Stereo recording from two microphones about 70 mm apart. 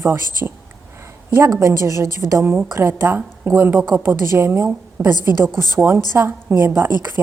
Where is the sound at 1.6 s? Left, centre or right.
Right.